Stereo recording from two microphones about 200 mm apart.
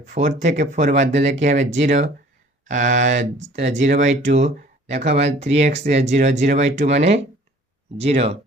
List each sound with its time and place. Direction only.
0.0 s speech: 40° right (ahead or behind)